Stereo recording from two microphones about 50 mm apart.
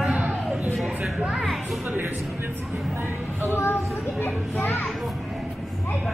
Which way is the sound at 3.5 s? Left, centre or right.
Left.